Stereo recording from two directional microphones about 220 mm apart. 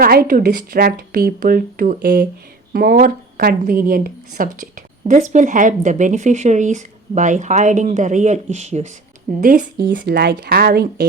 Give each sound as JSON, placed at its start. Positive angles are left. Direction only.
{"t": 0.0, "sound": "a woman's voice", "side_deg": -40}